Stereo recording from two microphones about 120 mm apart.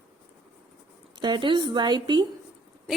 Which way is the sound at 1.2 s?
40° right (ahead or behind).